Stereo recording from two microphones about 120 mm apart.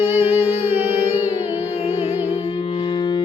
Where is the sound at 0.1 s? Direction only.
20° right (ahead or behind).